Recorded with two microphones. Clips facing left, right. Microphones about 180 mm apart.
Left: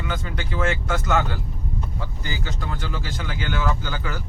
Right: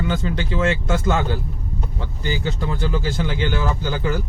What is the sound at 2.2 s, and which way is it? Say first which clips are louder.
Speech: right 9 dB; 25° right (ahead or behind).